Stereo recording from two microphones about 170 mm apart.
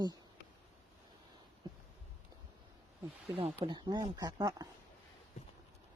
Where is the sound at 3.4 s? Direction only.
30° right (ahead or behind).